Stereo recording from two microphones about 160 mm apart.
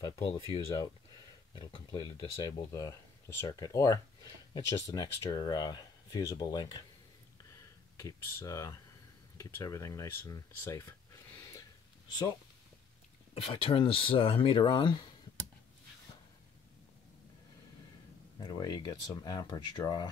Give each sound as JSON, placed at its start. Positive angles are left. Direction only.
{"t": 0.0, "sound": "speech", "side_deg": 30}
{"t": 8.0, "sound": "speech", "side_deg": 20}
{"t": 13.3, "sound": "speech", "side_deg": 35}
{"t": 18.4, "sound": "speech", "side_deg": 25}